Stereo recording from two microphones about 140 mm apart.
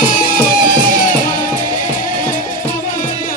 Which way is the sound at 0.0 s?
75° left (ahead or behind).